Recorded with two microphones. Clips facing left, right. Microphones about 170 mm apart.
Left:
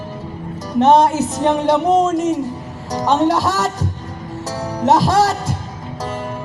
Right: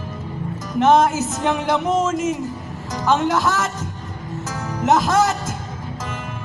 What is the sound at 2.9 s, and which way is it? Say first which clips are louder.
Speech: left 4 dB; 35° left (ahead or behind).